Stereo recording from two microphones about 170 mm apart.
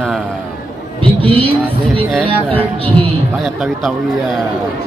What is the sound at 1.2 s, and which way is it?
Speech, 35° right (ahead or behind).